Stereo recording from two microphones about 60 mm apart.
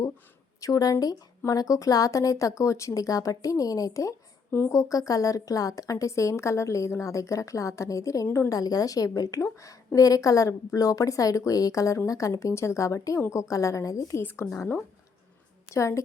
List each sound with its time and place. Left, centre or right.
0.6 s a woman's voice: left
1.5 s a woman's voice: left
8.4 s a woman's voice: left
9.4 s a woman's voice: left
14.2 s speech: left
15.7 s a woman's voice: left